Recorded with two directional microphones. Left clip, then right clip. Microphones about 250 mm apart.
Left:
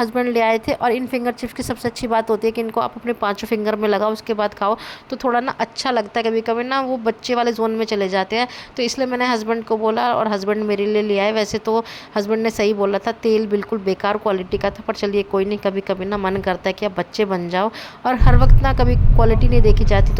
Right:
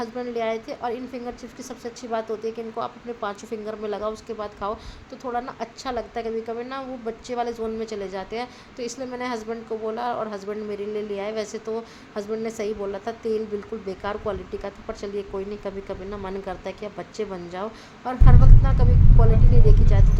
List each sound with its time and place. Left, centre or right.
0.0 s speech: left